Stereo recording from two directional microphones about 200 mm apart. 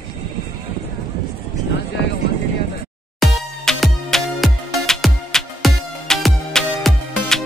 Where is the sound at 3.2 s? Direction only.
Centre (ahead or behind).